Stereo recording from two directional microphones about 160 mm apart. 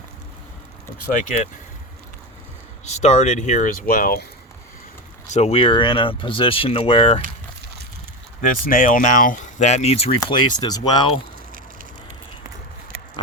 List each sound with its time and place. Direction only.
2.8 s speech: 45° left (ahead or behind); by 4.3 s 65° left (ahead or behind)
5.3 s speech: 40° left (ahead or behind)
8.4 s speech: 55° left (ahead or behind); by 10.2 s 40° left (ahead or behind)
10.2 s speech: 25° left (ahead or behind)